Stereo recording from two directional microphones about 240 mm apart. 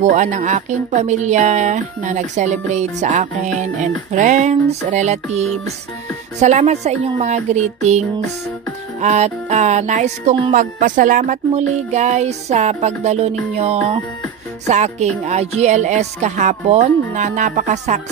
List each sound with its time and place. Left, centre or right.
0.0 s speech: right
9.0 s speech: right